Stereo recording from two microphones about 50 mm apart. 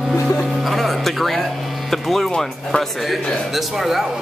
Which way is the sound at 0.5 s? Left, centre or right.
Centre.